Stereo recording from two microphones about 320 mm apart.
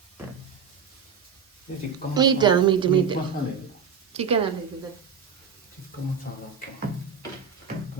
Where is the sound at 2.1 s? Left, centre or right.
Centre.